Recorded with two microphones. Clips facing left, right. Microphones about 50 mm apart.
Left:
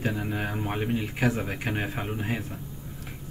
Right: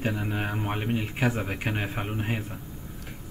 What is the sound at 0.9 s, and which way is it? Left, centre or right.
Speech, right.